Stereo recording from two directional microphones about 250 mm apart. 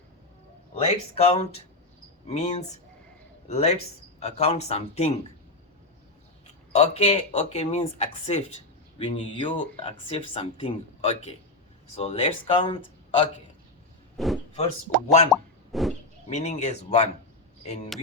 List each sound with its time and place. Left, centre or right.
0.8 s speech: left
6.7 s speech: left
14.2 s speech: centre
14.5 s speech: left
15.3 s plop: centre
16.3 s speech: left